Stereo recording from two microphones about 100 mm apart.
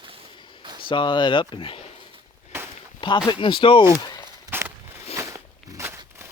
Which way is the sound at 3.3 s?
55° left (ahead or behind).